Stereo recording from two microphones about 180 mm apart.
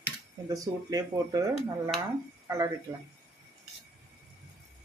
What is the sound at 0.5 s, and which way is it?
Speech, 20° right (ahead or behind).